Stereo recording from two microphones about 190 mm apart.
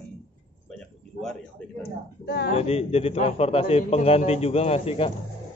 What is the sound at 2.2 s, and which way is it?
Speech, 60° left (ahead or behind).